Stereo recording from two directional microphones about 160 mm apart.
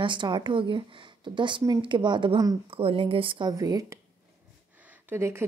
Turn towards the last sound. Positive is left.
turn(degrees=-15)  # may be behind; listen again after turning